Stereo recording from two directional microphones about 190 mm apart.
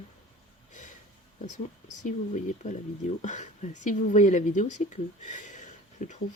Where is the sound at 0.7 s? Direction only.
40° left (ahead or behind).